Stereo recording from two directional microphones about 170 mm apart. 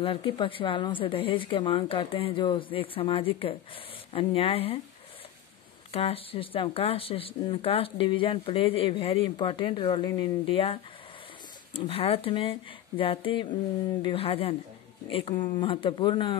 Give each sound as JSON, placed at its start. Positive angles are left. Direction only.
{"t": 0.0, "sound": "speech", "side_deg": 30}
{"t": 5.9, "sound": "speech", "side_deg": 35}